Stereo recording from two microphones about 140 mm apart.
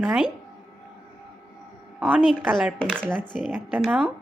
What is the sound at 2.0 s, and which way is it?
Speech, 10° right (ahead or behind).